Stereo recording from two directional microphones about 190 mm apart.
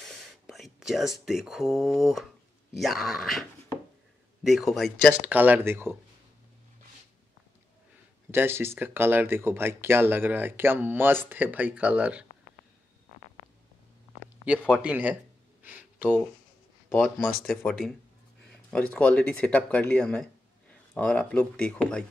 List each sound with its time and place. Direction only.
0.0 s whispering: centre (ahead or behind)
2.8 s speech: centre (ahead or behind)
8.3 s speech: 10° right (ahead or behind)
14.5 s speech: 5° right (ahead or behind)
15.6 s a sound: 10° right (ahead or behind)
17.0 s speech: centre (ahead or behind)